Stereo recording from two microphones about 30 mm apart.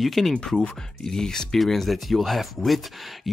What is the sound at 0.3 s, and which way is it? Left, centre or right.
Speech, centre.